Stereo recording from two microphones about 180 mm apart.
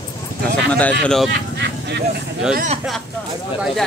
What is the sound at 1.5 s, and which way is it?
Vehicle, 70° right (ahead or behind).